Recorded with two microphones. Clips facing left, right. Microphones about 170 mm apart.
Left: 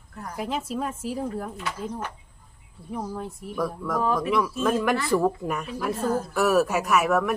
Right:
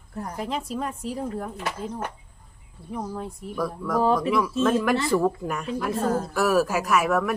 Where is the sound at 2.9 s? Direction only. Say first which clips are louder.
Even; centre (ahead or behind).